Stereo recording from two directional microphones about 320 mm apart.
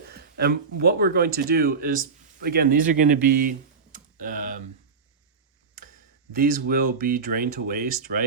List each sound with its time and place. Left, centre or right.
0.1 s speech: right
3.9 s computer keyboard: right
6.3 s speech: right